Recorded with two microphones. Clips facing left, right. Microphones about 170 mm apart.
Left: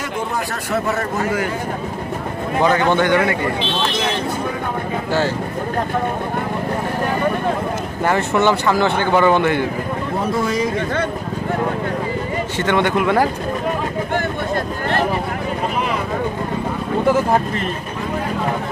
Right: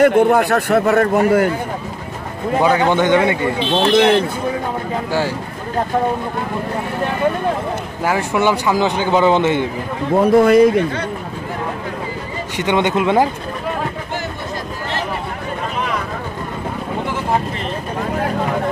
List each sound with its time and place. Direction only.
0.0 s a man's voice: 60° right (ahead or behind)
2.6 s speech: 10° right (ahead or behind)
3.9 s a man's voice: 60° right (ahead or behind)
8.0 s speech: 10° right (ahead or behind)
10.3 s a man's voice: 60° right (ahead or behind)
12.5 s speech: 15° right (ahead or behind)